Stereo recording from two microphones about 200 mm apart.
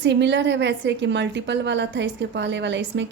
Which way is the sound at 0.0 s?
60° right (ahead or behind).